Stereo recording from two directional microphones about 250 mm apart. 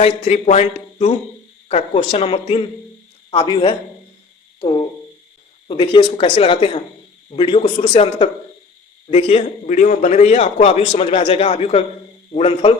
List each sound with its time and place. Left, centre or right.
0.0 s a man's voice: left